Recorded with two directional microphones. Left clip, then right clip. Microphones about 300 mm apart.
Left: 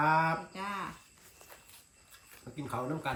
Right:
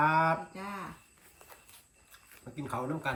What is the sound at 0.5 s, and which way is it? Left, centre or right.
Speech, centre.